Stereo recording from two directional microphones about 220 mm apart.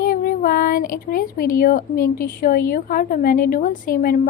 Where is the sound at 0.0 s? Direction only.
40° left (ahead or behind).